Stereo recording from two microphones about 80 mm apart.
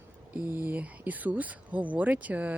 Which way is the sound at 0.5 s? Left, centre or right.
Right.